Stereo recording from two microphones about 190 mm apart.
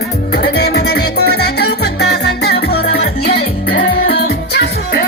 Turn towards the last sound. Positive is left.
turn(degrees=60)  # may be behind; listen again after turning